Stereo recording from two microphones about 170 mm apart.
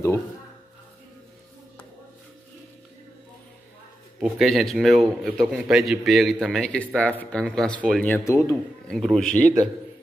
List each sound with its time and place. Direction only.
4.2 s a man's voice: centre (ahead or behind); by 8.5 s 15° left (ahead or behind)
8.8 s a man's voice: 5° left (ahead or behind)